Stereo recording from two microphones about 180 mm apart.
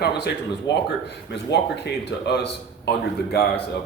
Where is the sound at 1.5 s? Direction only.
65° left (ahead or behind).